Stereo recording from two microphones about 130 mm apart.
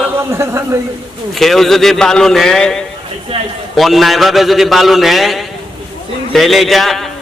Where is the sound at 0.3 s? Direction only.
20° right (ahead or behind).